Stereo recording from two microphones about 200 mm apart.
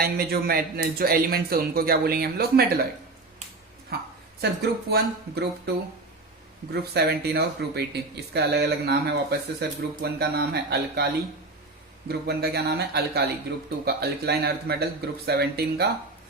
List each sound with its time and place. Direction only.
0.0 s a man's voice: 50° right (ahead or behind)
3.9 s a man's voice: 50° right (ahead or behind)
6.9 s a man's voice: 55° right (ahead or behind)
12.0 s a man's voice: 50° right (ahead or behind)